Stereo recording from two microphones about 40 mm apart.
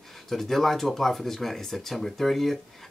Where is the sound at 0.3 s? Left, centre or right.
Centre.